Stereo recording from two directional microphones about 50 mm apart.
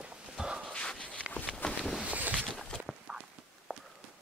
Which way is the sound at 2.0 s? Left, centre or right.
Right.